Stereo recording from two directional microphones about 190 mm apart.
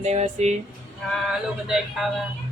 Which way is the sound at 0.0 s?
35° right (ahead or behind).